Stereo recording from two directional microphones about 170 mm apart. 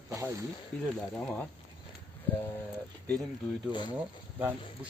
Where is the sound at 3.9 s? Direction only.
10° right (ahead or behind).